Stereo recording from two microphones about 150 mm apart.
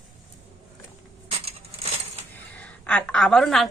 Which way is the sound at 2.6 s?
10° left (ahead or behind).